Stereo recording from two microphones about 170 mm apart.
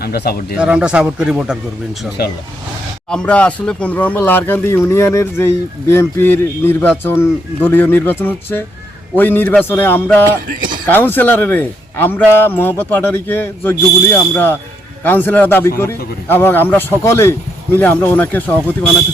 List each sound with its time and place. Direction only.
0.0 s speech: 65° left (ahead or behind)
0.5 s speech: 5° right (ahead or behind)
3.1 s speech: 5° left (ahead or behind)